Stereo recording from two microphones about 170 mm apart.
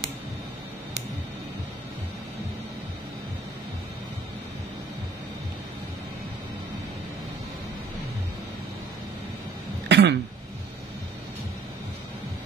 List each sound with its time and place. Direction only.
9.8 s throat clearing: 90° right